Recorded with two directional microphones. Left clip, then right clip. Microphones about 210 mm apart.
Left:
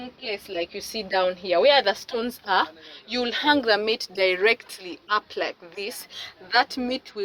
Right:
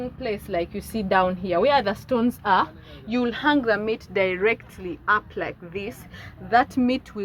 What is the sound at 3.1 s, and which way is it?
Speech, 35° left (ahead or behind).